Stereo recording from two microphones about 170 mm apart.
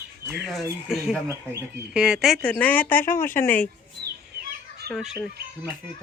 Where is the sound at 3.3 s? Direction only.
10° left (ahead or behind).